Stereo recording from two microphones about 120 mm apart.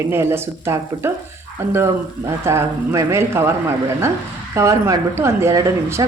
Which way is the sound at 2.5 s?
25° right (ahead or behind).